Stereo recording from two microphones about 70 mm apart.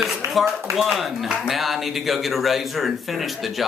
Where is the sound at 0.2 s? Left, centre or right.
Right.